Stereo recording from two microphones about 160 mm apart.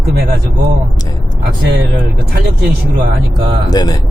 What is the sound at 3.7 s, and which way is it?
Speech, 25° left (ahead or behind).